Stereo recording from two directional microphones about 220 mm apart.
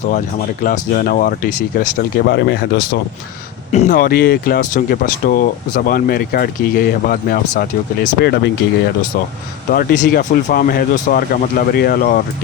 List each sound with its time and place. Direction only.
0.6 s speech: 40° left (ahead or behind)
3.7 s speech: 35° left (ahead or behind)